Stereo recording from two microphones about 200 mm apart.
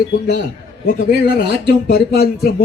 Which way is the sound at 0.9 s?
50° left (ahead or behind).